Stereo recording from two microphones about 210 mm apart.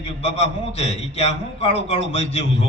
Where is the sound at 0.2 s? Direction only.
30° left (ahead or behind).